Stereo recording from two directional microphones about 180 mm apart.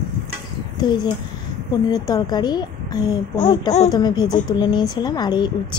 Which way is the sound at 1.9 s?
20° left (ahead or behind).